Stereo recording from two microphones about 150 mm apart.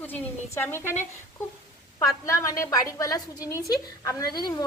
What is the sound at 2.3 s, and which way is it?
A woman's voice, 20° left (ahead or behind).